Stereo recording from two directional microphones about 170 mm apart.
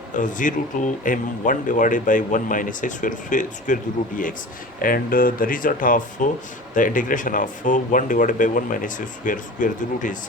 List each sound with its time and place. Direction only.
0.1 s speech: 50° left (ahead or behind)
4.8 s speech: 55° left (ahead or behind)